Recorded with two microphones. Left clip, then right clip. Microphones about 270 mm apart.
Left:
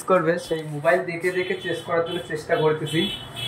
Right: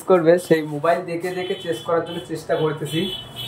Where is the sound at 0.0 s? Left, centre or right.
Centre.